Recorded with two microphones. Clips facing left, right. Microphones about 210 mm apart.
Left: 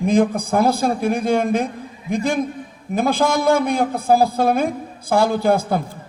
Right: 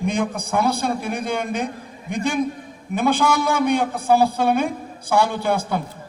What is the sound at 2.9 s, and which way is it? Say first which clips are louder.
Speech: left 1 dB; 35° left (ahead or behind).